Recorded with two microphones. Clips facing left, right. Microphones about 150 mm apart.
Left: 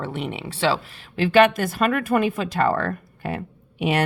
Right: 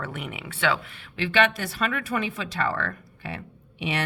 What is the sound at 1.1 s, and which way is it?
Speech, 45° left (ahead or behind).